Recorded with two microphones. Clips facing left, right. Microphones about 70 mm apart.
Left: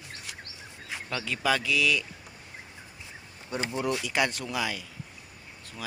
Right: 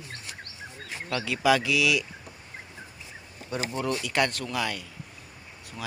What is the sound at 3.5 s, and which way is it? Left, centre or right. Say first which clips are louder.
Speech: even; centre.